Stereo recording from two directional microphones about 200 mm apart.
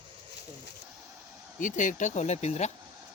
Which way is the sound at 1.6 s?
40° left (ahead or behind).